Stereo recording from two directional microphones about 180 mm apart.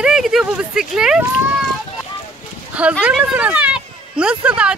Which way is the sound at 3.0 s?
5° right (ahead or behind).